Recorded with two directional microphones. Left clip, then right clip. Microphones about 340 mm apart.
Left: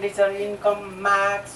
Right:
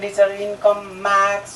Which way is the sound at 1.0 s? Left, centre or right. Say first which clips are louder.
Right 4 dB; right.